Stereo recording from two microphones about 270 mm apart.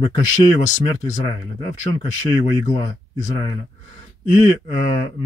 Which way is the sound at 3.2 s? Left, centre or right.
Centre.